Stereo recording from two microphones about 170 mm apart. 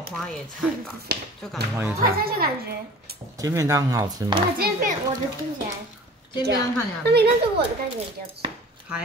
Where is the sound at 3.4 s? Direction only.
20° right (ahead or behind).